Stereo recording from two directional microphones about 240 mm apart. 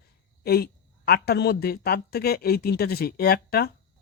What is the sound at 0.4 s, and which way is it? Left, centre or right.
A woman's voice, left.